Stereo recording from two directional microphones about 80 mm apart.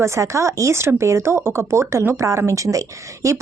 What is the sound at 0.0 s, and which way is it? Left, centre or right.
Speech, right.